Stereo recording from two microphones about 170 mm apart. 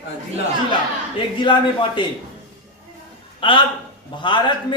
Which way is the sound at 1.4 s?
30° left (ahead or behind).